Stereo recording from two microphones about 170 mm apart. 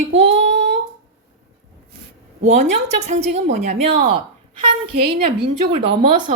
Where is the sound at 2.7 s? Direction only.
40° right (ahead or behind).